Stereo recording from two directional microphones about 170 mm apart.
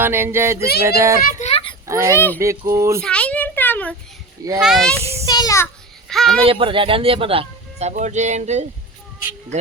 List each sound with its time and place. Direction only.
0.0 s speech: 15° right (ahead or behind)
1.2 s a sound: 45° left (ahead or behind)
1.9 s speech: 15° right (ahead or behind)
2.1 s speech: 10° left (ahead or behind)
2.4 s speech: 20° right (ahead or behind)
3.0 s a sound: 5° left (ahead or behind)
4.6 s speech: centre (ahead or behind)
5.2 s child singing: 20° left (ahead or behind)
6.1 s speech: centre (ahead or behind)
6.4 s speech: 30° right (ahead or behind)